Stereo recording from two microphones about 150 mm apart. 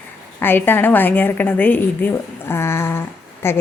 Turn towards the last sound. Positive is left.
turn(degrees=15)  # may be behind; listen again after turning